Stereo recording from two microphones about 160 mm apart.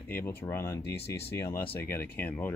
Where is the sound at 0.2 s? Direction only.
15° left (ahead or behind).